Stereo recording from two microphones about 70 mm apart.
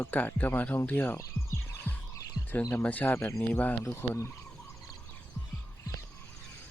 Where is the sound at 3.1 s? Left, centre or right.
Left.